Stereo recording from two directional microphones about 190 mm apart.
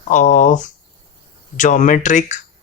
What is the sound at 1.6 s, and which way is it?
Speech, 40° left (ahead or behind).